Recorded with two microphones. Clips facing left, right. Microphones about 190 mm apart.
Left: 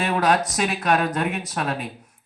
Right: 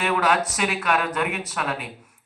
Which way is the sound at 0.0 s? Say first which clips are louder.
Left 1 dB; 35° left (ahead or behind).